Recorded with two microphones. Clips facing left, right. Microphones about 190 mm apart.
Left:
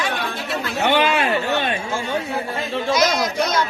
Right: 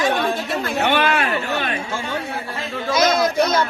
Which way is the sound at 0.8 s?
10° left (ahead or behind).